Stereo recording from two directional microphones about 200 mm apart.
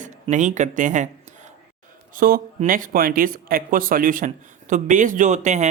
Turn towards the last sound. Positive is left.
turn(degrees=-35)  # may be behind; listen again after turning